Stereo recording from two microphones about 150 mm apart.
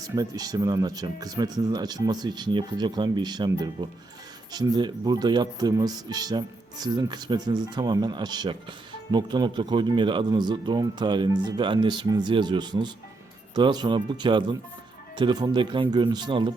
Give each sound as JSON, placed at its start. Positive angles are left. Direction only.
{"t": 0.0, "sound": "speech", "side_deg": -25}